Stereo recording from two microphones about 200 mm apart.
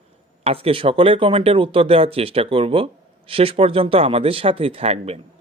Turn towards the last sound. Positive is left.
turn(degrees=-30)  # may be behind; listen again after turning